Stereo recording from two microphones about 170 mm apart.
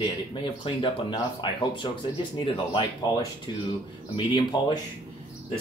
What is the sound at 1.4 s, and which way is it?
Speech, 30° left (ahead or behind).